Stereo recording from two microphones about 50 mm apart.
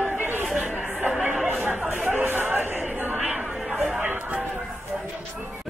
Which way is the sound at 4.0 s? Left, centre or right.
Right.